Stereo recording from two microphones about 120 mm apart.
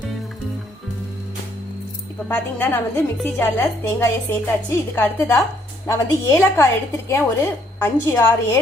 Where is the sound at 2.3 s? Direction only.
15° left (ahead or behind).